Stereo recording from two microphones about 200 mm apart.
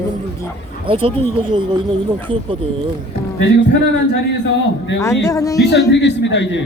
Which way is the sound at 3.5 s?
65° left (ahead or behind).